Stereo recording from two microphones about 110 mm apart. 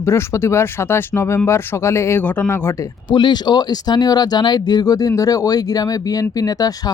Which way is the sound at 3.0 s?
45° left (ahead or behind).